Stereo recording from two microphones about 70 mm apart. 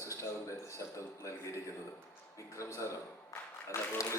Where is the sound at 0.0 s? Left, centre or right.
Left.